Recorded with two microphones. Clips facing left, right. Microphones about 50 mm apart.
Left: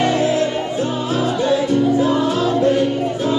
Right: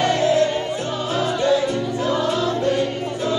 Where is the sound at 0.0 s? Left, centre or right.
Left.